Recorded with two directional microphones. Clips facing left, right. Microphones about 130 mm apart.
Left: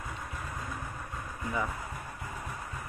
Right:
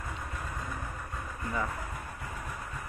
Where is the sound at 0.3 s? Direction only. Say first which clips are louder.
Right 1 dB; 15° left (ahead or behind).